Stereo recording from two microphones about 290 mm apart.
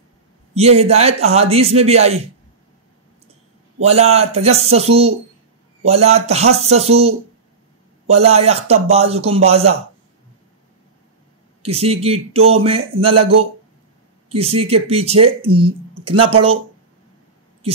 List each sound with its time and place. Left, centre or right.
0.6 s speech: right
3.8 s speech: right
8.2 s speech: right
11.6 s speech: right
14.3 s speech: centre